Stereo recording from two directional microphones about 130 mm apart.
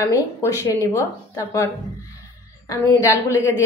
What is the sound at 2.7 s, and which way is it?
Speech, 25° left (ahead or behind).